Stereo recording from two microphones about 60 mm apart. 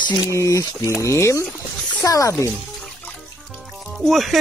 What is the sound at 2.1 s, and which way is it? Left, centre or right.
Speech, left.